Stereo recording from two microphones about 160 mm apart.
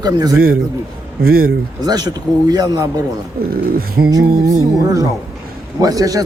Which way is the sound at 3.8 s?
70° right (ahead or behind).